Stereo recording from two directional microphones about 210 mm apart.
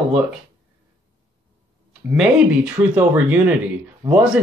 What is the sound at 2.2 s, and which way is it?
Speech, 5° right (ahead or behind).